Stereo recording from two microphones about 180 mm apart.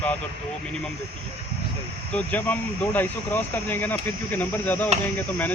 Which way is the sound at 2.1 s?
10° left (ahead or behind).